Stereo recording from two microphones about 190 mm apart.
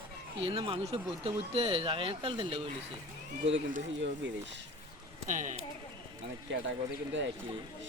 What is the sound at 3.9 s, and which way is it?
Speech, 70° right (ahead or behind).